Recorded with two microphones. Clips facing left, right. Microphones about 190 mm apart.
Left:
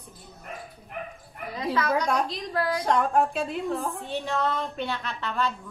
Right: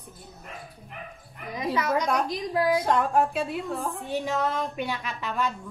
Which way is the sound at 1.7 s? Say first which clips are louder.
Even; 15° right (ahead or behind).